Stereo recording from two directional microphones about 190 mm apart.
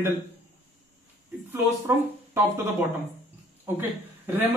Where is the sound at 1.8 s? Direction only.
15° right (ahead or behind).